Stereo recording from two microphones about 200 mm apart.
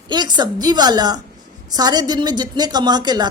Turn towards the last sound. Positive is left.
turn(degrees=-20)  # may be behind; listen again after turning